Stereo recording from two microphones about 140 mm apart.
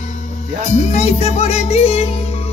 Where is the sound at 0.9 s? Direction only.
50° left (ahead or behind).